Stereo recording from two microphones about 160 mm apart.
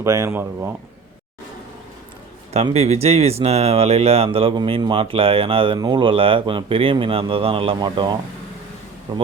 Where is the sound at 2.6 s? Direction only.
40° right (ahead or behind).